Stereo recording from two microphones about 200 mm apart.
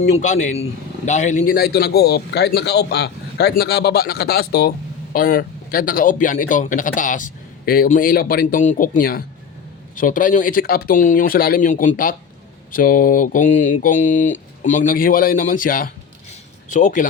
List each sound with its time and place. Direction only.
0.1 s a man's voice: 35° left (ahead or behind)